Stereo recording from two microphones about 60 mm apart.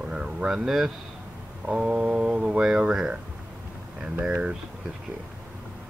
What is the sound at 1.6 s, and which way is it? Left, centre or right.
Speech, centre.